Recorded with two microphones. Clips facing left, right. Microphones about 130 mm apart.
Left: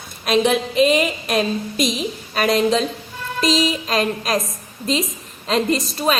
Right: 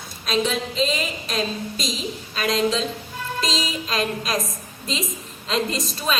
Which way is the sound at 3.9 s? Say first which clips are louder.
Left 4 dB; 45° left (ahead or behind).